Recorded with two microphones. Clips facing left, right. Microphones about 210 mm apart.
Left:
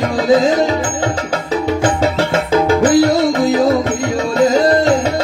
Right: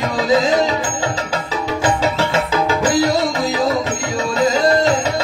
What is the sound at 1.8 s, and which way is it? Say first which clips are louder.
Music: left 3 dB; 50° left (ahead or behind).